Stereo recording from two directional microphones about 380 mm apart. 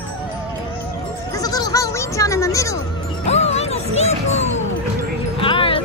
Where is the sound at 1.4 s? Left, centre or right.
Centre.